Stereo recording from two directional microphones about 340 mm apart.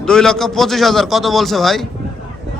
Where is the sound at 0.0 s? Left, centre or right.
Centre.